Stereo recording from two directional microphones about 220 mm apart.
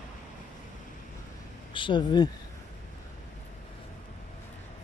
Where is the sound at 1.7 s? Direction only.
20° left (ahead or behind).